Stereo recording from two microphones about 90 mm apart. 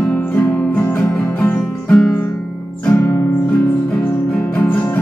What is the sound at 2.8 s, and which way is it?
Music, 20° left (ahead or behind).